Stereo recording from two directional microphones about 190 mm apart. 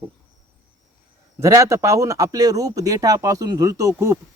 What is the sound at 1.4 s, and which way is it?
A man's voice, 15° right (ahead or behind).